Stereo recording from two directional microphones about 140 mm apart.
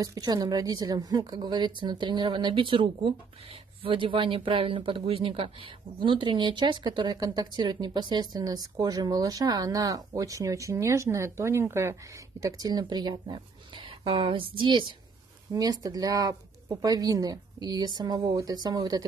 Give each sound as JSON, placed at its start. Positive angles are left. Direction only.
{"t": 0.0, "sound": "speech", "side_deg": -25}